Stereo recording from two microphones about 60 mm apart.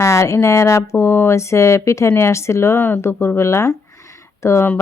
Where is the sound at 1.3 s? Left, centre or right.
Left.